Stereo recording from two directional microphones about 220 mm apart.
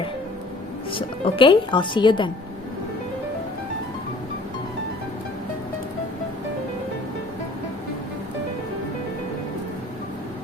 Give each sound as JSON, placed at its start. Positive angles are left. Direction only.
{"t": 0.9, "sound": "speech", "side_deg": 25}